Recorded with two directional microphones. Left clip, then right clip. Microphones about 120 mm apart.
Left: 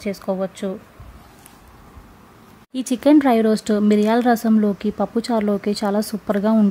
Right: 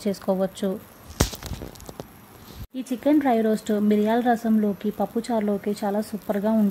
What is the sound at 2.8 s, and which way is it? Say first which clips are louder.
Speech: left 7 dB; 40° left (ahead or behind).